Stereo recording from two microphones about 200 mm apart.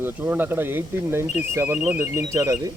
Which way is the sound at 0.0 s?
10° right (ahead or behind).